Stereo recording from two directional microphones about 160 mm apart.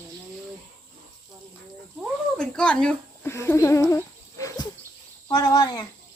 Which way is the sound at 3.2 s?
15° left (ahead or behind).